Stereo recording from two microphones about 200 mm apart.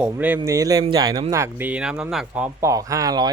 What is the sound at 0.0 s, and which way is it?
Speech, 5° right (ahead or behind).